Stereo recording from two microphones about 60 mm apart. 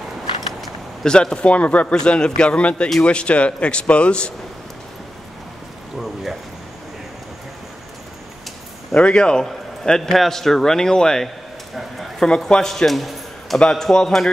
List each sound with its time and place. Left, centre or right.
1.0 s a man's voice: centre
5.9 s speech: centre
8.9 s a man's voice: centre
13.6 s a man's voice: centre